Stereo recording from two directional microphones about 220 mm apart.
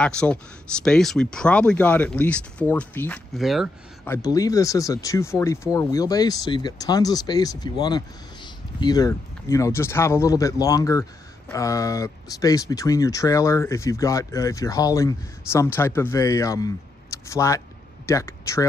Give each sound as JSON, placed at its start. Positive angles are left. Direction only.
{"t": 0.0, "sound": "speech", "side_deg": 5}
{"t": 3.4, "sound": "speech", "side_deg": 0}
{"t": 4.0, "sound": "speech", "side_deg": 15}